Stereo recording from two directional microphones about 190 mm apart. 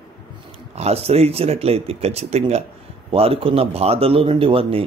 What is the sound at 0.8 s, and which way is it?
A man's voice, 35° right (ahead or behind).